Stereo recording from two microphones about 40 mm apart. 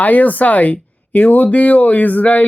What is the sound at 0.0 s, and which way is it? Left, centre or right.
Speech, left.